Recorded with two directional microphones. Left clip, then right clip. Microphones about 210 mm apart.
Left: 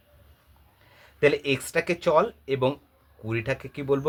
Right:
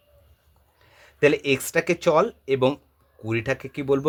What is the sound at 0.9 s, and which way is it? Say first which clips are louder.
Speech: right 2 dB; 35° right (ahead or behind).